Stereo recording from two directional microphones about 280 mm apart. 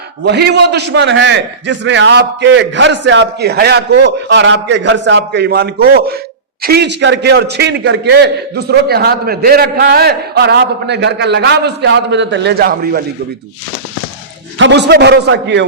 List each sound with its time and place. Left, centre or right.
0.3 s a man's voice: right
14.6 s a man's voice: right